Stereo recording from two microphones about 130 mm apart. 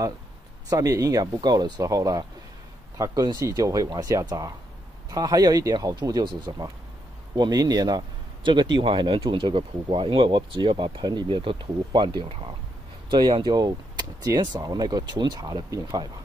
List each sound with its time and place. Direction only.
0.7 s speech: 25° right (ahead or behind)